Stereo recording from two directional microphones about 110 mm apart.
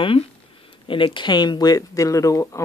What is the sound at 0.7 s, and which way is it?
Speech, 50° left (ahead or behind).